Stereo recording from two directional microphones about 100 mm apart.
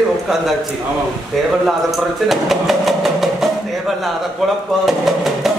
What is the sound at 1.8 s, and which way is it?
Speech, centre (ahead or behind).